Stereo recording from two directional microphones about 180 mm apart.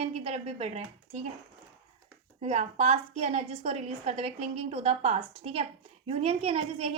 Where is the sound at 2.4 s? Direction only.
35° right (ahead or behind).